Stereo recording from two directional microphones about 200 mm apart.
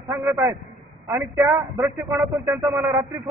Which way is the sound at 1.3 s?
Centre (ahead or behind).